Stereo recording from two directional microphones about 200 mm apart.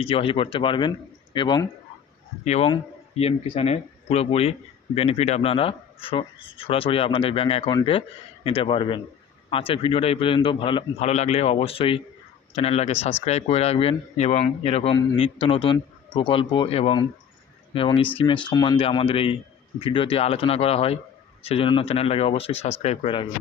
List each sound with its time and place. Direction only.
0.0 s speech: 30° left (ahead or behind)
2.4 s speech: 35° left (ahead or behind)